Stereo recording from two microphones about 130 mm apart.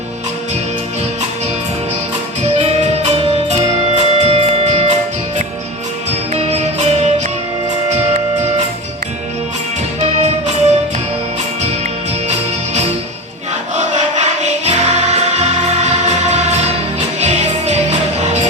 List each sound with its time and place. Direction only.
2.6 s music: 60° right (ahead or behind)
6.1 s music: 60° right (ahead or behind)
10.0 s music: 60° right (ahead or behind)
13.7 s music: 65° right (ahead or behind)